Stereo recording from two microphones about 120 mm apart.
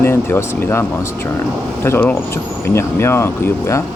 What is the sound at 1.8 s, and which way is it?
Speech, 15° left (ahead or behind).